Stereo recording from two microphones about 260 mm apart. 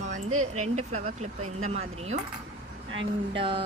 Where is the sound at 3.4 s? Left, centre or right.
Right.